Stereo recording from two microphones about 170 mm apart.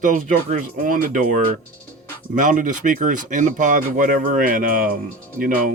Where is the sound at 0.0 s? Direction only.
50° right (ahead or behind).